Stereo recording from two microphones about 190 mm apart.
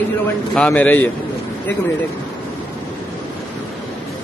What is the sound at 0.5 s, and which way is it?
Speech, 5° left (ahead or behind).